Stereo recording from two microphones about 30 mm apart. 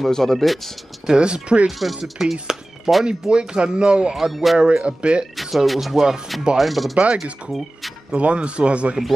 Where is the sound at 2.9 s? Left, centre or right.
Right.